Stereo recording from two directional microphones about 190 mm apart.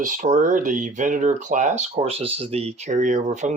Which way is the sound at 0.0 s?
40° right (ahead or behind).